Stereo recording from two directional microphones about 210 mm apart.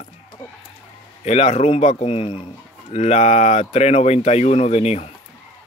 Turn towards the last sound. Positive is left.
turn(degrees=30)  # may be behind; listen again after turning